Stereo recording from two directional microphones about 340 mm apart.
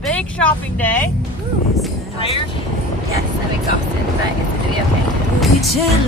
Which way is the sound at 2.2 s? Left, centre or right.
Centre.